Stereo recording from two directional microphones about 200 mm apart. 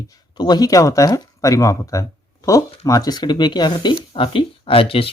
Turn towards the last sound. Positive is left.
turn(degrees=30)  # may be behind; listen again after turning